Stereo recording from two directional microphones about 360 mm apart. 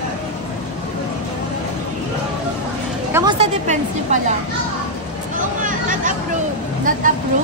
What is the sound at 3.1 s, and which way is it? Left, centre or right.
A woman's voice, centre.